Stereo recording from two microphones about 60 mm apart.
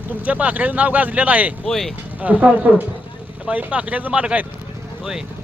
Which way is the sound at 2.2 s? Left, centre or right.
Right.